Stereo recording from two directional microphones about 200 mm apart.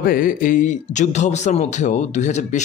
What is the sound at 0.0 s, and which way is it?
Speech, 45° left (ahead or behind).